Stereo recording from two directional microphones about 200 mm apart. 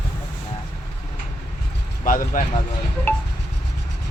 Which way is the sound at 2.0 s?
40° left (ahead or behind).